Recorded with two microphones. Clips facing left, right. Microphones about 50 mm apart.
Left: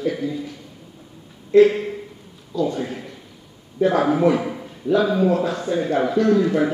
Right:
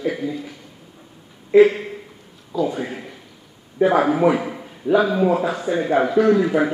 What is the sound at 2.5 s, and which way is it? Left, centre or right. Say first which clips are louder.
A man's voice: even; centre.